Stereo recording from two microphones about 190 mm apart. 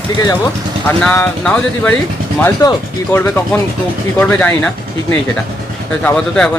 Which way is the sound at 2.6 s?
20° left (ahead or behind).